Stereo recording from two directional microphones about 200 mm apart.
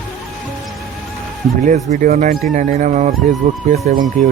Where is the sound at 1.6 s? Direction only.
40° right (ahead or behind).